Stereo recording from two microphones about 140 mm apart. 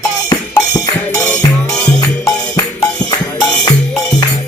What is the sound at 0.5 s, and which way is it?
Music, 25° left (ahead or behind).